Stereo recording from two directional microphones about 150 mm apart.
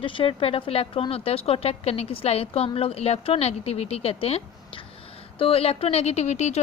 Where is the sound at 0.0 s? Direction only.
35° left (ahead or behind).